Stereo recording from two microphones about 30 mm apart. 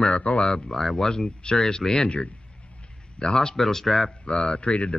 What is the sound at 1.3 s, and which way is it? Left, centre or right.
Speech, left.